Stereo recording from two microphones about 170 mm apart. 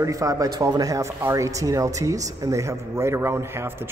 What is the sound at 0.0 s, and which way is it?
Speech, 20° right (ahead or behind).